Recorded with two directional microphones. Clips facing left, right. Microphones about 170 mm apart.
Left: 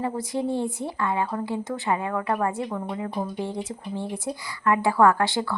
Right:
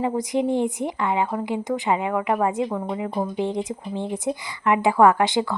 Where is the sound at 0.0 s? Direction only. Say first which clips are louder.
Right 4 dB; 20° right (ahead or behind).